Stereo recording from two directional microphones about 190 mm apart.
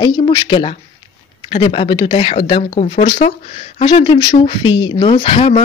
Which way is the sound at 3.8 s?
30° left (ahead or behind).